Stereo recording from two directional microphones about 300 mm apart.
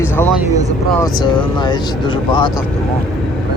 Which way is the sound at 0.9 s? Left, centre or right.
Centre.